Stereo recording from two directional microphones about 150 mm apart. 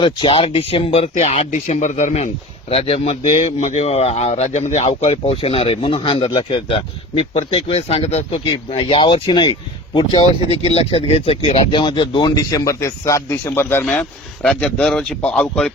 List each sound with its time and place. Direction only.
0.0 s speech: 35° left (ahead or behind); by 15.7 s 5° left (ahead or behind)